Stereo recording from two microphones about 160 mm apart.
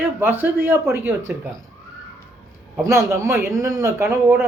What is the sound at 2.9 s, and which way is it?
A man's voice, 20° right (ahead or behind).